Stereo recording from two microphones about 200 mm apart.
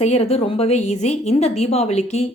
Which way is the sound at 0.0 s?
30° left (ahead or behind).